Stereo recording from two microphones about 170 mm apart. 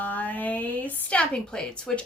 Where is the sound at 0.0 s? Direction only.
10° left (ahead or behind).